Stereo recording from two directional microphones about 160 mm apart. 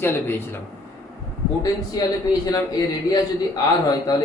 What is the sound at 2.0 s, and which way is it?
A man's voice, 20° left (ahead or behind).